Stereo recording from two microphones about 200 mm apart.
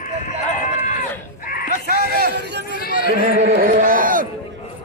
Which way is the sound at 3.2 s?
45° right (ahead or behind).